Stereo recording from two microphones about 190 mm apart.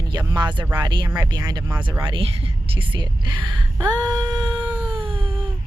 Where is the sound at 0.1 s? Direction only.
20° right (ahead or behind).